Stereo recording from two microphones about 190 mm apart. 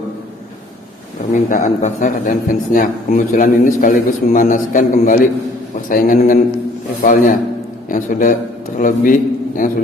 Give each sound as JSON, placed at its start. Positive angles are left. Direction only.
{"t": 1.3, "sound": "a man's voice", "side_deg": 45}